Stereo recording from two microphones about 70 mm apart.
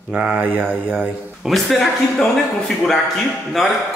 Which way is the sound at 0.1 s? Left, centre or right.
Centre.